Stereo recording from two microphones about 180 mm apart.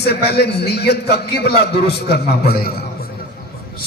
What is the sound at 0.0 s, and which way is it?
A man's voice, 65° left (ahead or behind).